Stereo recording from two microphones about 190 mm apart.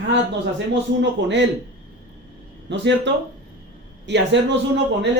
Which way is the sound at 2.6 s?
65° right (ahead or behind).